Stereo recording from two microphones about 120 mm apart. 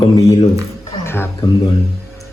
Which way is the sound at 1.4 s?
30° left (ahead or behind).